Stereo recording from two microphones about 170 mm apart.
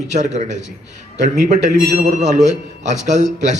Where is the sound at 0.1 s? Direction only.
45° right (ahead or behind).